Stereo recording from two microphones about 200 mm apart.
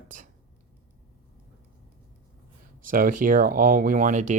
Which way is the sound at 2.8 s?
45° right (ahead or behind).